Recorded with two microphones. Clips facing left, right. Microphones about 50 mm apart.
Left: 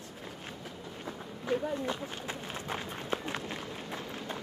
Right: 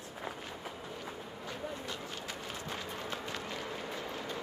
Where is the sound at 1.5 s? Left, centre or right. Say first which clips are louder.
Left 10 dB; left.